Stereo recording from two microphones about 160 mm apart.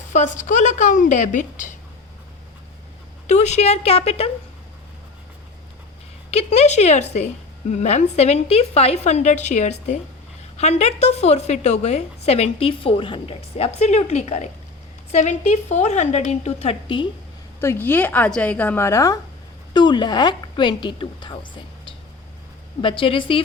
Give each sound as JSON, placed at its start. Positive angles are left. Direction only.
{"t": 0.1, "sound": "a woman's voice", "side_deg": 50}
{"t": 3.2, "sound": "a woman's voice", "side_deg": 45}
{"t": 6.3, "sound": "a woman's voice", "side_deg": 40}
{"t": 17.6, "sound": "a woman's voice", "side_deg": 15}